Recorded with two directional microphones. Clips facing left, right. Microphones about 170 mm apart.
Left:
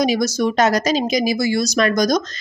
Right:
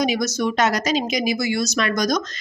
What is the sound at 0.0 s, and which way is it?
Speech, 35° left (ahead or behind).